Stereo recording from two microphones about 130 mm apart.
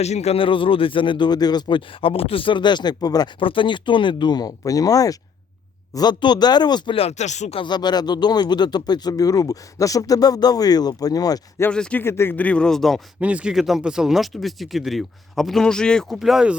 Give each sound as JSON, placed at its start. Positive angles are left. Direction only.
{"t": 0.0, "sound": "speech", "side_deg": 55}
{"t": 3.4, "sound": "speech", "side_deg": 40}
{"t": 7.5, "sound": "speech", "side_deg": 35}
{"t": 11.7, "sound": "speech", "side_deg": 10}
{"t": 13.1, "sound": "speech", "side_deg": -10}